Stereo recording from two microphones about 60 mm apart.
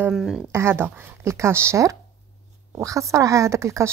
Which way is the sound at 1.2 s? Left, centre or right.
Right.